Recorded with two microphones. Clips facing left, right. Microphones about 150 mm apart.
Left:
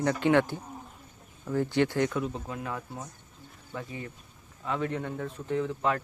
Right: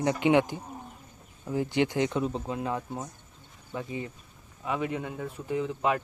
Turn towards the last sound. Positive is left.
turn(degrees=-15)  # may be behind; listen again after turning